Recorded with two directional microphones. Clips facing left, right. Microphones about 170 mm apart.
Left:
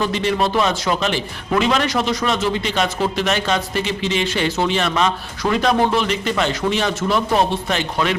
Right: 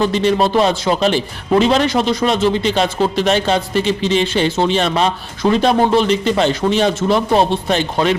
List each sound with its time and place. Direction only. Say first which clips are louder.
0.0 s a man's voice: right 5 dB; 35° right (ahead or behind)